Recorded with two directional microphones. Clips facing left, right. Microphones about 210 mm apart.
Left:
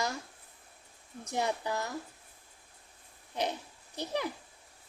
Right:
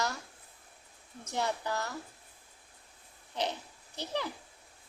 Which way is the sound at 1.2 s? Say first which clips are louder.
Left 1 dB; 15° left (ahead or behind).